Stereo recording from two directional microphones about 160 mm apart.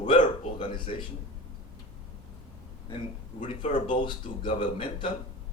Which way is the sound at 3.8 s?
30° left (ahead or behind).